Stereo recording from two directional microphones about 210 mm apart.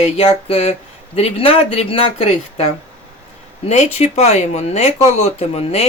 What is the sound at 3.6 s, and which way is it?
Speech, 30° left (ahead or behind).